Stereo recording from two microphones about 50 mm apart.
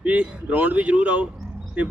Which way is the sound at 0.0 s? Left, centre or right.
Right.